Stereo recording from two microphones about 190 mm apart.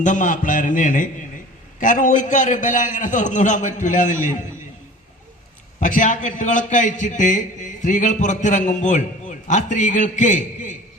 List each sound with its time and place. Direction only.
0.0 s a man's voice: 40° left (ahead or behind)
5.8 s a man's voice: 40° left (ahead or behind)